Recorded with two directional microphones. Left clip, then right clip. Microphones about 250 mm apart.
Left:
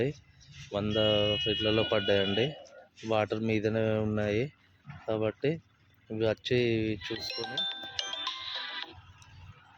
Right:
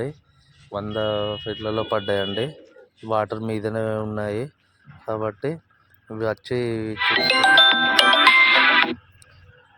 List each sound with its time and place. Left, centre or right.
0.7 s speech: centre
6.7 s music: right